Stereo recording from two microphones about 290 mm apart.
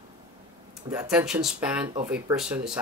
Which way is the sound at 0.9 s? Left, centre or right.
Centre.